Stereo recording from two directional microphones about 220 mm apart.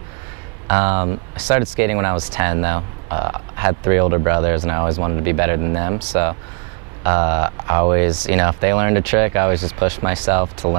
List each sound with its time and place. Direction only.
0.7 s speech: 20° right (ahead or behind)
1.5 s speech: 10° right (ahead or behind)